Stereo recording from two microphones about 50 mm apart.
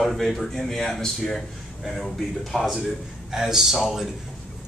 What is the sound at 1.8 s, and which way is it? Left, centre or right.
A man's voice, centre.